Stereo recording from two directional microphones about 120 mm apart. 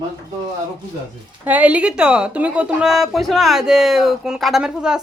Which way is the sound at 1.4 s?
15° right (ahead or behind).